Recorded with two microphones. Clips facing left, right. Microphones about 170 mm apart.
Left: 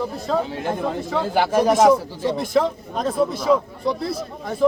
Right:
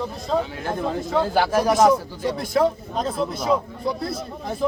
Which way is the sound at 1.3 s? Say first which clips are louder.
Left 4 dB; 15° left (ahead or behind).